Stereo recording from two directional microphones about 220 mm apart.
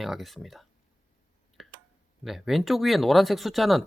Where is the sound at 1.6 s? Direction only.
Centre (ahead or behind).